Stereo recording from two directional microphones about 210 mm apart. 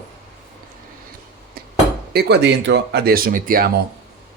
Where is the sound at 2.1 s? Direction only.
50° right (ahead or behind).